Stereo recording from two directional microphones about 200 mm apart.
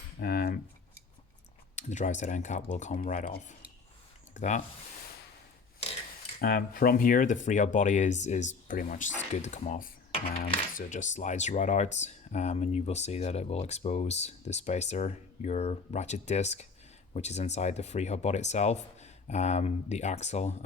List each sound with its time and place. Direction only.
0.2 s speech: 45° left (ahead or behind)
1.7 s speech: 35° left (ahead or behind)
6.4 s speech: 45° left (ahead or behind)